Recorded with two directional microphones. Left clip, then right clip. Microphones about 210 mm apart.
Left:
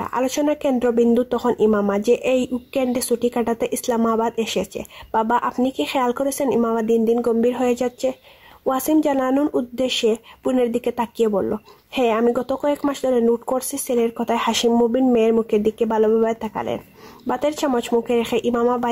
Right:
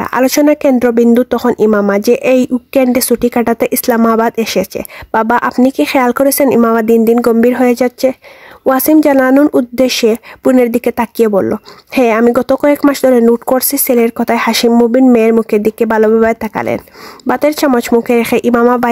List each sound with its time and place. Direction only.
0.0 s speech: 45° right (ahead or behind)